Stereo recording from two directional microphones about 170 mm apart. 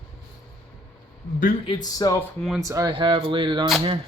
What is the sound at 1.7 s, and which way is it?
Speech, 20° left (ahead or behind).